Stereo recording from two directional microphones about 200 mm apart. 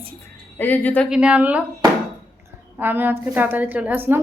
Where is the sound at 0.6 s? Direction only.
10° left (ahead or behind).